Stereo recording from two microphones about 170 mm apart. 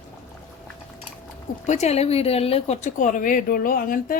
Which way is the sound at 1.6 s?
40° left (ahead or behind).